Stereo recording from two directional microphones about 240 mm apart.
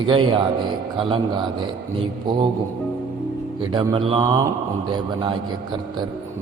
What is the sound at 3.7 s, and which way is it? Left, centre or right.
A man's voice, centre.